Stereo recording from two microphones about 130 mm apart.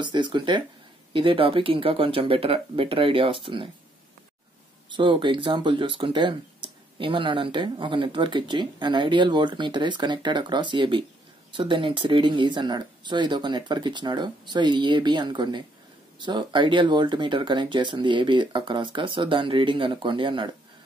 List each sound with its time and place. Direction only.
0.0 s speech: 35° right (ahead or behind)
4.8 s speech: 40° right (ahead or behind)